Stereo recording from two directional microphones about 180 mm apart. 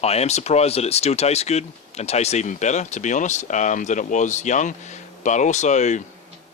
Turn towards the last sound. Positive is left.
turn(degrees=40)  # may be behind; listen again after turning